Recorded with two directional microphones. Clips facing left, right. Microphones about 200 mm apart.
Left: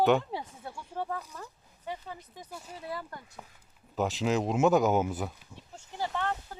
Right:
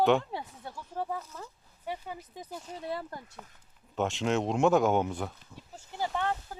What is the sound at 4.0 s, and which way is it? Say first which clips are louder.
Speech: even; centre (ahead or behind).